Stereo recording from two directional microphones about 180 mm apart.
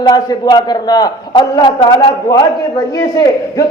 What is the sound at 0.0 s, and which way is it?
A man's voice, 25° left (ahead or behind).